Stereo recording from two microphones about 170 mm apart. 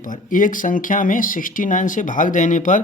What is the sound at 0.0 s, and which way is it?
Speech, 50° left (ahead or behind).